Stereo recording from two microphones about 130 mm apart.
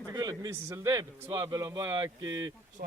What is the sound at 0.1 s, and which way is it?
Speech, 30° right (ahead or behind).